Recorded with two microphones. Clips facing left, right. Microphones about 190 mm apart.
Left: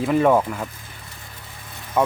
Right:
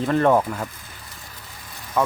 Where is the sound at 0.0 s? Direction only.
5° left (ahead or behind).